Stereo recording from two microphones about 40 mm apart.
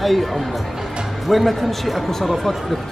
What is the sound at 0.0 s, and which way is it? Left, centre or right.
Speech, centre.